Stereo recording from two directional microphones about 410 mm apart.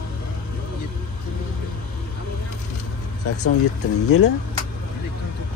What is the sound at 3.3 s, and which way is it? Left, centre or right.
Speech, left.